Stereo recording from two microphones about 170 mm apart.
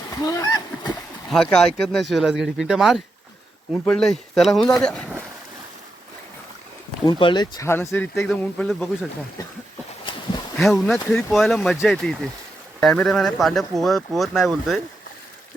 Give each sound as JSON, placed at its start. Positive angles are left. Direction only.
{"t": 0.2, "sound": "speech", "side_deg": 20}
{"t": 1.3, "sound": "speech", "side_deg": 5}
{"t": 7.0, "sound": "speech", "side_deg": 30}
{"t": 10.6, "sound": "speech", "side_deg": 0}